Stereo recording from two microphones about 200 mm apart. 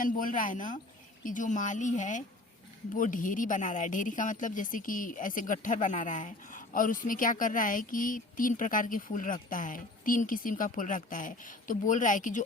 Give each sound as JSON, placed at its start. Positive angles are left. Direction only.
{"t": 0.0, "sound": "speech", "side_deg": 45}